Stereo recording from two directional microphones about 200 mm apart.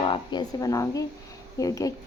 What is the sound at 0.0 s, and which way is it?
A woman's voice, 25° left (ahead or behind).